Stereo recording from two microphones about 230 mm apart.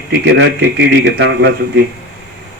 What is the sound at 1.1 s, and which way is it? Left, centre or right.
Speech, right.